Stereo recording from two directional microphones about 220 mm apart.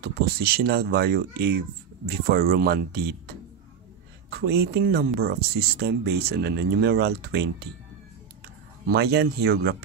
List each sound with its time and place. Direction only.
0.0 s speech: 45° right (ahead or behind)
4.3 s speech: 45° right (ahead or behind)
8.8 s speech: 45° right (ahead or behind)